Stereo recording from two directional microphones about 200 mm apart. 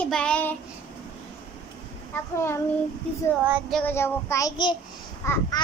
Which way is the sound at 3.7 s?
Centre (ahead or behind).